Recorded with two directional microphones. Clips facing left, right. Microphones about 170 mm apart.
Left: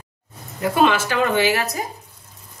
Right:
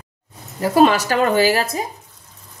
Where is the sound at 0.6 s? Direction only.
35° right (ahead or behind).